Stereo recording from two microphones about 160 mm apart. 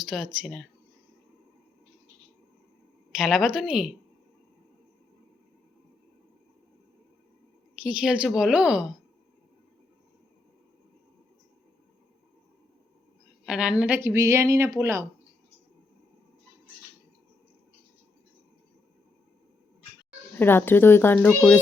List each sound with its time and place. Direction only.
0.0 s speech: centre (ahead or behind)
3.2 s speech: centre (ahead or behind)
7.9 s speech: 5° right (ahead or behind)
13.4 s speech: 5° right (ahead or behind)
20.4 s speech: 10° left (ahead or behind)